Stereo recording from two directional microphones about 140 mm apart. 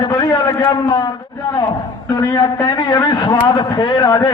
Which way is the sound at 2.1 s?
30° left (ahead or behind).